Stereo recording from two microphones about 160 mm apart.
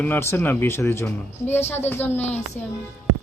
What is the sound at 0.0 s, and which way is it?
A woman's voice, 15° left (ahead or behind).